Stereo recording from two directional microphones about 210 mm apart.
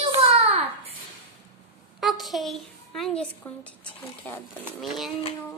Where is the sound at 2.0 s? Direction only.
Centre (ahead or behind).